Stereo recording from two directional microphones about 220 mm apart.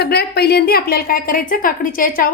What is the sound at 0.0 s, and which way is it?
A woman's voice, 45° left (ahead or behind).